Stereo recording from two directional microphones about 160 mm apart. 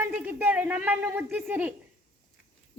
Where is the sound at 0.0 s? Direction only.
10° right (ahead or behind).